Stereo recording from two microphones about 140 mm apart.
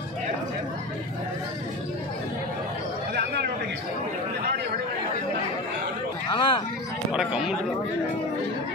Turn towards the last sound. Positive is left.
turn(degrees=-5)  # may be behind; listen again after turning